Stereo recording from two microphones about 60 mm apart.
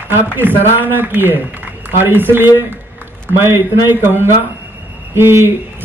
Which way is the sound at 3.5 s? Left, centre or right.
Right.